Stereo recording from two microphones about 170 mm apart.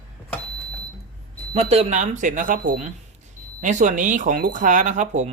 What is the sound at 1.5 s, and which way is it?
Speech, 40° right (ahead or behind).